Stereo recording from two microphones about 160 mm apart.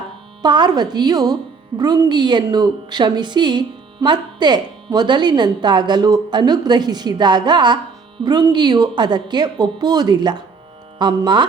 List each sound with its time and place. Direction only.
0.4 s speech: 25° right (ahead or behind)